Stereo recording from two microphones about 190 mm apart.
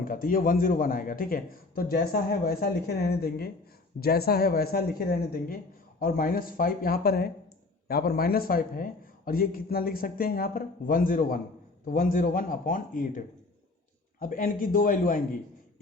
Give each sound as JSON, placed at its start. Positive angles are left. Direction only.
{"t": 0.0, "sound": "a man's voice", "side_deg": 45}